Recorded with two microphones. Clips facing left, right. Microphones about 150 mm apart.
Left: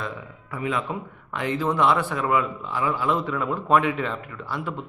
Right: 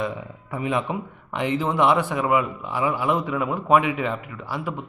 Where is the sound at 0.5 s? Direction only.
20° right (ahead or behind).